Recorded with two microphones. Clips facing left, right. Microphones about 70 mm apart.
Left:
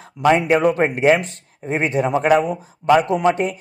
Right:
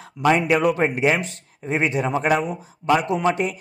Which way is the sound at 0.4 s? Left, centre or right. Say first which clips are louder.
Left 3 dB; left.